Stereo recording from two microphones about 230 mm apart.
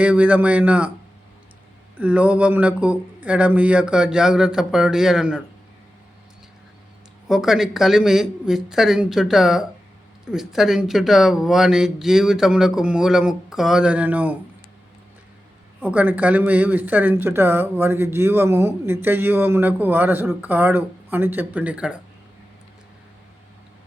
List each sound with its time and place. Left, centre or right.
0.0 s speech: centre
2.0 s speech: centre
7.3 s speech: centre
15.8 s speech: centre